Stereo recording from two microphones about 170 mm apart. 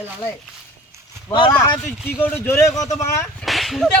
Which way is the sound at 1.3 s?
30° left (ahead or behind).